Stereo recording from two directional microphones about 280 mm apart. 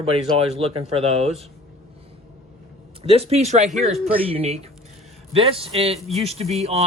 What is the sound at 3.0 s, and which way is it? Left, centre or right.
Speech, right.